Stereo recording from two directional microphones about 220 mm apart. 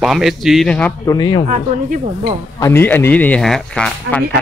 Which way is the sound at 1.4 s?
35° right (ahead or behind).